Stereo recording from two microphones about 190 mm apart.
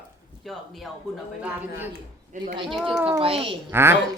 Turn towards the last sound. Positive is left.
turn(degrees=-10)  # may be behind; listen again after turning